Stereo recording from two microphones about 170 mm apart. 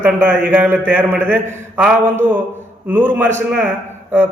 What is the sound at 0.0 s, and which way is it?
A man's voice, 10° right (ahead or behind).